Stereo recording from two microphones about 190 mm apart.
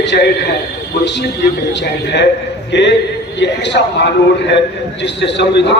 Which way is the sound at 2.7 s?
65° left (ahead or behind).